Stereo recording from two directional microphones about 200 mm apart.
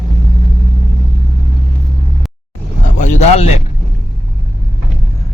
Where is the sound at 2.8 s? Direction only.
40° left (ahead or behind).